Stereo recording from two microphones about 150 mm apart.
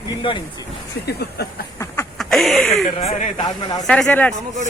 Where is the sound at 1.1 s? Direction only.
90° left.